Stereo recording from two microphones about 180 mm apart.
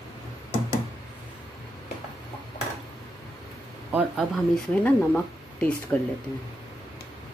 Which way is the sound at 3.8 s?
10° right (ahead or behind).